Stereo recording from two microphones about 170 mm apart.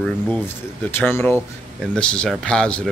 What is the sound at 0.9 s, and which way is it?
A man's voice, 10° left (ahead or behind).